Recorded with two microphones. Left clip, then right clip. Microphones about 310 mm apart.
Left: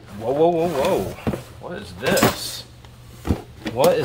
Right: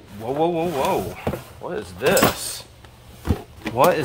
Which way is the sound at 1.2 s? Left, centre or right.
Centre.